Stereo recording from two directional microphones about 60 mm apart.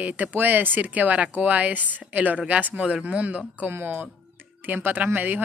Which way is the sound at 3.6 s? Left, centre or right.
Right.